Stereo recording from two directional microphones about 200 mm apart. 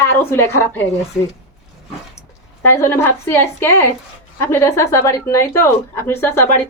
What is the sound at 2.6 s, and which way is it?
Speech, 10° left (ahead or behind).